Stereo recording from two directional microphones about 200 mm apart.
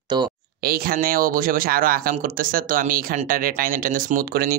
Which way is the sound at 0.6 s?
45° right (ahead or behind).